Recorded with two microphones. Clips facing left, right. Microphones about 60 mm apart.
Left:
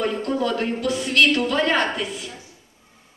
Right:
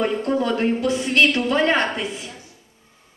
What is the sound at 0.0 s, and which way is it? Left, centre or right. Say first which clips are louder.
A woman's voice: right 2 dB; right.